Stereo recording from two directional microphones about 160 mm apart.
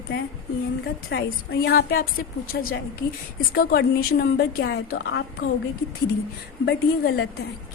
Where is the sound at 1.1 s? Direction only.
90° left.